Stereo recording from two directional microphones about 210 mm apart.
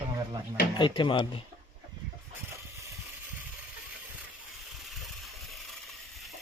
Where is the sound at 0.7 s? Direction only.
20° left (ahead or behind).